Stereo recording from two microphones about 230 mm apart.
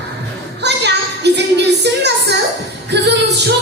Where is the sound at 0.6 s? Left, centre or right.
Right.